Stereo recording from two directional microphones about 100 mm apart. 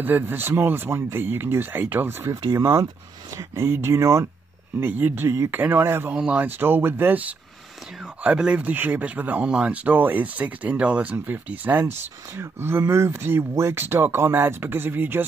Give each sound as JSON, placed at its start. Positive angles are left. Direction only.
{"t": 0.0, "sound": "speech", "side_deg": -20}
{"t": 4.7, "sound": "speech", "side_deg": -20}